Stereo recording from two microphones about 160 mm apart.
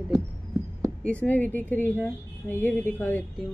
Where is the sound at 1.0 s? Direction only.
10° left (ahead or behind).